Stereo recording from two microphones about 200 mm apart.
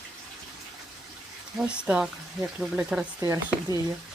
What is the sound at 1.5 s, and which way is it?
Speech, 5° right (ahead or behind).